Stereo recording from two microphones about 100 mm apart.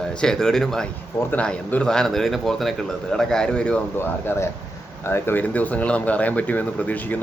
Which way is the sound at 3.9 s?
25° left (ahead or behind).